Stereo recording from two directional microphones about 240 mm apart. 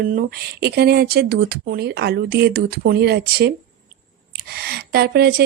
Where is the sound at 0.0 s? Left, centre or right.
Right.